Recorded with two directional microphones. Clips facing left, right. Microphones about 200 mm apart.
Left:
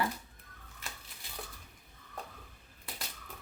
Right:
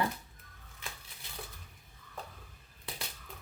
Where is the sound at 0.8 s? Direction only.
Centre (ahead or behind).